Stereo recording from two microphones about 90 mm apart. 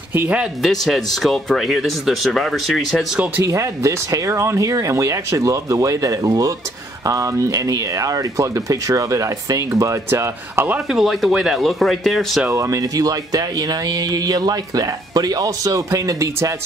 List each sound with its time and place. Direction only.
0.1 s a man's voice: 25° right (ahead or behind)
0.4 s speech: centre (ahead or behind)
3.4 s speech: 35° right (ahead or behind)
10.9 s speech: centre (ahead or behind)
12.4 s speech: 35° right (ahead or behind)